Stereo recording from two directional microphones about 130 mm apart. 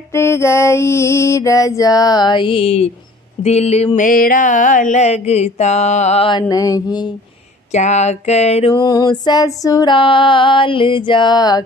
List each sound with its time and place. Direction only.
0.1 s a sound: 20° left (ahead or behind); by 2.9 s 50° left (ahead or behind)
3.4 s mantra: 55° left (ahead or behind)
4.0 s mantra: 90° left; by 6.2 s 60° left (ahead or behind)
6.5 s a sound: 25° left (ahead or behind)
7.7 s mantra: 60° left (ahead or behind)
8.7 s female singing: 35° left (ahead or behind)